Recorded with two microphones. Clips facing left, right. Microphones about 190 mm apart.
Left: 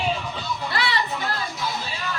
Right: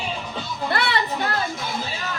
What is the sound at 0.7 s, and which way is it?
Children playing, 55° right (ahead or behind).